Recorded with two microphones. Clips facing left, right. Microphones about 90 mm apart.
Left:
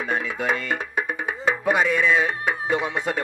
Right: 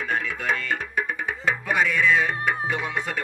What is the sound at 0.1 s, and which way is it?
Speech, 20° left (ahead or behind).